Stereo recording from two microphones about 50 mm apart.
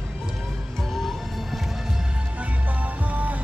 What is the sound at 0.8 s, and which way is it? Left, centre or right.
Music, centre.